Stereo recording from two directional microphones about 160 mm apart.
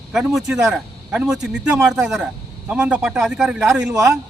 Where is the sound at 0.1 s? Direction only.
5° right (ahead or behind).